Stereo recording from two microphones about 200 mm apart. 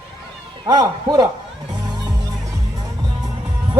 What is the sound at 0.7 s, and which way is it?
Speech, 20° right (ahead or behind).